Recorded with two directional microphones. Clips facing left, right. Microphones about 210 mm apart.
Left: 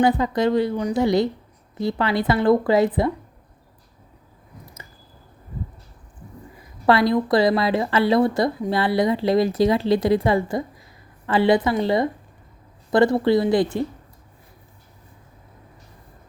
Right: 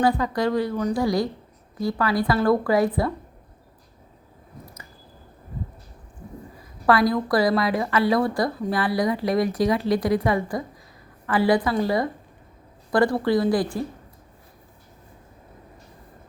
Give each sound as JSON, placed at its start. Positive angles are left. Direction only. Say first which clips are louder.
{"t": 0.0, "sound": "a woman's voice", "louder": "left 3 dB", "side_deg": 20}
{"t": 6.8, "sound": "a woman's voice", "louder": "left 2 dB", "side_deg": 25}